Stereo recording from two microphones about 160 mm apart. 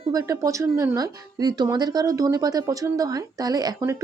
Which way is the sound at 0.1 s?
20° right (ahead or behind).